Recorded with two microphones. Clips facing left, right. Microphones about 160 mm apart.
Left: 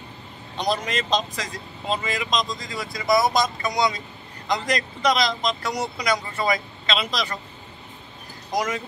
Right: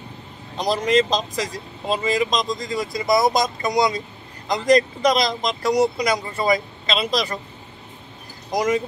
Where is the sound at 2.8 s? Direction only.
15° right (ahead or behind).